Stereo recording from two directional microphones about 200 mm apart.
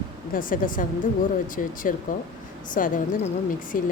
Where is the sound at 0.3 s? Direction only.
45° left (ahead or behind).